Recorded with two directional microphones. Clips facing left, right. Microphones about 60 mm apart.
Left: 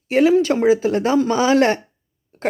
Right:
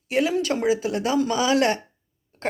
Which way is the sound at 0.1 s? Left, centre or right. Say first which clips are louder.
Left 8 dB; left.